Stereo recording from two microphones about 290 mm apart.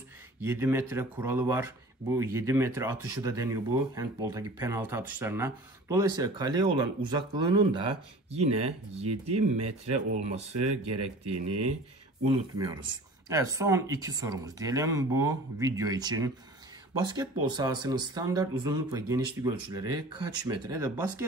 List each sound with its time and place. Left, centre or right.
0.4 s speech: centre